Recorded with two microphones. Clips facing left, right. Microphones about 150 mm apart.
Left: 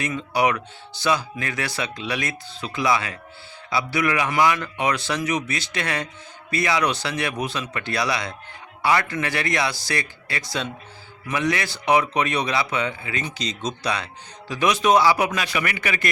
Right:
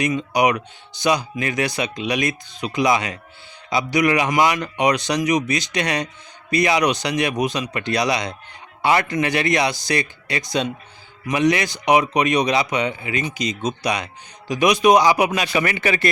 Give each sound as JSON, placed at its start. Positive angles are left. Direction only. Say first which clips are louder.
{"t": 0.0, "sound": "speech", "louder": "right 3 dB", "side_deg": -15}
{"t": 15.5, "sound": "speech", "louder": "right 5 dB", "side_deg": -30}